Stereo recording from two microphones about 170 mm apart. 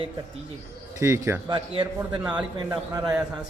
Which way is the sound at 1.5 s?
30° right (ahead or behind).